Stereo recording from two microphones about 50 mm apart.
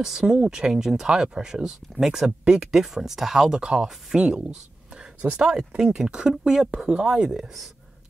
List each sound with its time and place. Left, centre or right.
0.0 s speech: centre